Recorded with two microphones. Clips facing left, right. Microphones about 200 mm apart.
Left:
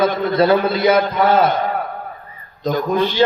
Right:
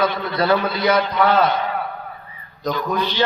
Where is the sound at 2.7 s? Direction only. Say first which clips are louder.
Left 6 dB; 45° left (ahead or behind).